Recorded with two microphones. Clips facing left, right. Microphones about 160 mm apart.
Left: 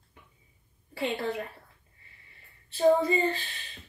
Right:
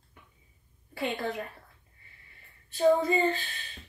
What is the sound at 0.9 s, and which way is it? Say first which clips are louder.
Speech: left 1 dB; 30° left (ahead or behind).